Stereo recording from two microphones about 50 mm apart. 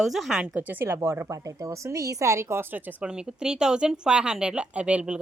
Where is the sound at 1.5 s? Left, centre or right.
Right.